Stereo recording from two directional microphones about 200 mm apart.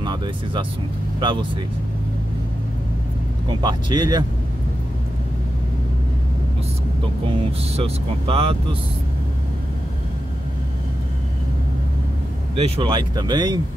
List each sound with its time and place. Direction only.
0.0 s speech: 20° right (ahead or behind)
3.4 s speech: 20° right (ahead or behind)
7.2 s speech: 30° right (ahead or behind)
12.5 s speech: 30° right (ahead or behind)